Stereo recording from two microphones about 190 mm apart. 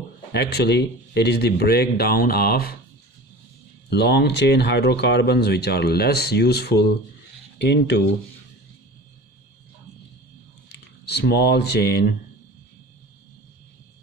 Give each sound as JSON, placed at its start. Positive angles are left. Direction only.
{"t": 0.3, "sound": "speech", "side_deg": 60}
{"t": 3.9, "sound": "speech", "side_deg": 60}
{"t": 11.1, "sound": "speech", "side_deg": 60}